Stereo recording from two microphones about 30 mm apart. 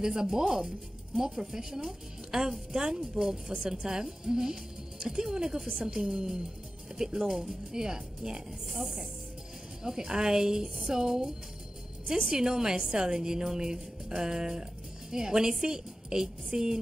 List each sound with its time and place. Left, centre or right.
0.0 s a woman's voice: right
3.5 s a woman's voice: right
3.8 s a woman's voice: right
9.8 s a woman's voice: right
12.4 s a woman's voice: right